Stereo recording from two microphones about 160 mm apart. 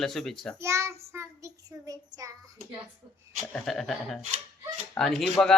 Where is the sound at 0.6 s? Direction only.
15° right (ahead or behind).